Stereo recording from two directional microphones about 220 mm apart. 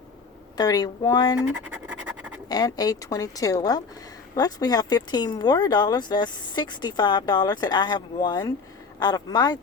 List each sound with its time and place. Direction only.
0.5 s a woman's voice: 15° left (ahead or behind)
1.4 s scratch: 5° right (ahead or behind)
2.5 s a woman's voice: 15° left (ahead or behind)